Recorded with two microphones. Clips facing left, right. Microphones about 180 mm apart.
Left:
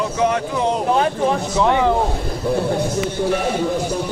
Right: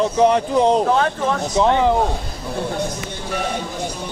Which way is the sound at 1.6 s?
20° right (ahead or behind).